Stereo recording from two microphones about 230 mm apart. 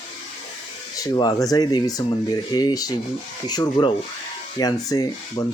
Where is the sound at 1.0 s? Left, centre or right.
Centre.